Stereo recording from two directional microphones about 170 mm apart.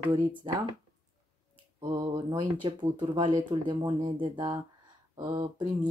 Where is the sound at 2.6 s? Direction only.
30° right (ahead or behind).